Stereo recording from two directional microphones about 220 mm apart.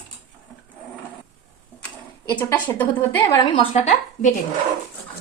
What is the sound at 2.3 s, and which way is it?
Speech, 5° left (ahead or behind).